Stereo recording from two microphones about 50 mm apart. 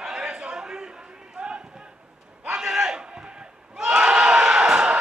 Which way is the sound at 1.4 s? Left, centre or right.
Centre.